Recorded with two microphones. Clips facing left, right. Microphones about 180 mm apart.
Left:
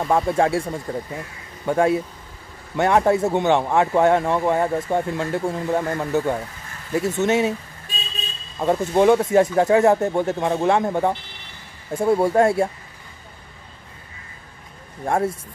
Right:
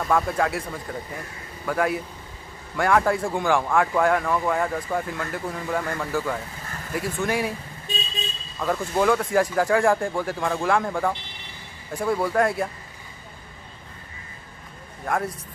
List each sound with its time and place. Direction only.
0.0 s speech: 25° left (ahead or behind)
8.5 s speech: 25° left (ahead or behind)
15.0 s speech: 25° left (ahead or behind)